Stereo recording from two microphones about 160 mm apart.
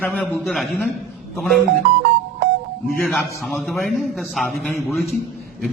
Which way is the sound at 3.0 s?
10° left (ahead or behind).